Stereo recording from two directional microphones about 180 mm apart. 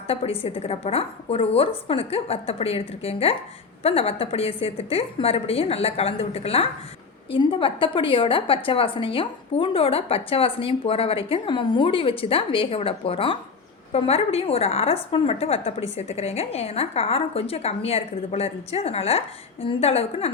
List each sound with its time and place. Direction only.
0.1 s a woman's voice: 30° left (ahead or behind)